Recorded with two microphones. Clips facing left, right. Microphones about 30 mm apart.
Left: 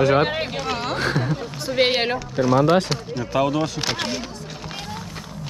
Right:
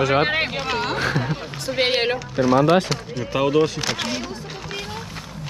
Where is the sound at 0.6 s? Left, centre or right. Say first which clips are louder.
Right 2 dB; centre.